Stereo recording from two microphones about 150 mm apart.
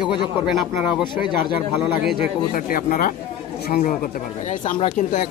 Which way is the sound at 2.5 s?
65° left (ahead or behind).